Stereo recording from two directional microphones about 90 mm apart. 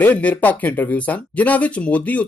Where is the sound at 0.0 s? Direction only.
15° left (ahead or behind).